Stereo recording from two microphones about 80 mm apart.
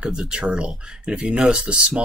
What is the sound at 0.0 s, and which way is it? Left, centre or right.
Speech, centre.